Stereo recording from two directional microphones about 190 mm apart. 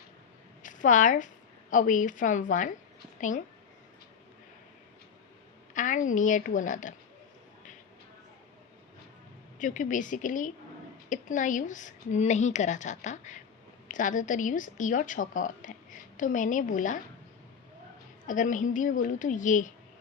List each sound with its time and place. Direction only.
0.6 s a woman's voice: 40° left (ahead or behind)
5.7 s a woman's voice: 40° left (ahead or behind)
9.6 s a woman's voice: 45° left (ahead or behind)
18.3 s a woman's voice: 40° left (ahead or behind)